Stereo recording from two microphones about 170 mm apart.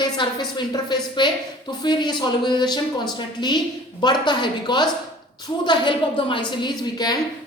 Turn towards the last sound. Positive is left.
turn(degrees=25)  # may be behind; listen again after turning